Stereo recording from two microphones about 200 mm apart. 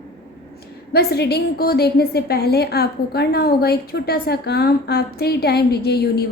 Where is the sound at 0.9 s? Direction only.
55° left (ahead or behind).